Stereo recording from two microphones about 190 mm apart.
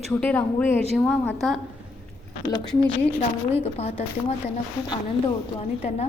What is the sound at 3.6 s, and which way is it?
Speech, 35° left (ahead or behind).